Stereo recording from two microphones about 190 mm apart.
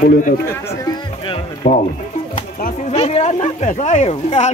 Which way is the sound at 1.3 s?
40° left (ahead or behind).